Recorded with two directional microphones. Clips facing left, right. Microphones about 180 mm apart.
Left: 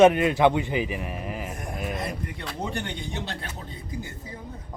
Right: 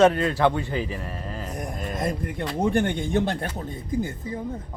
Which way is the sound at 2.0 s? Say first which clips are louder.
Right 5 dB; 50° right (ahead or behind).